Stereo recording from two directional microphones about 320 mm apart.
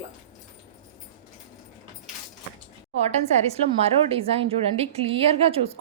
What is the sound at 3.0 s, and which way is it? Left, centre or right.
Speech, centre.